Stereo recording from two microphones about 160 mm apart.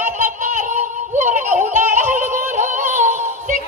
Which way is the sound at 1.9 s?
50° right (ahead or behind).